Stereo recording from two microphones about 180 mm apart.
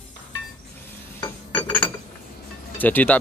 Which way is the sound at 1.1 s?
10° left (ahead or behind).